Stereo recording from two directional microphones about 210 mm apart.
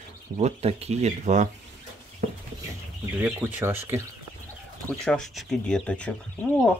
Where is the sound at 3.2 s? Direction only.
10° right (ahead or behind).